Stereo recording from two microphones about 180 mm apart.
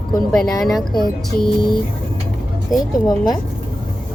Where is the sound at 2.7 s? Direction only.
20° left (ahead or behind).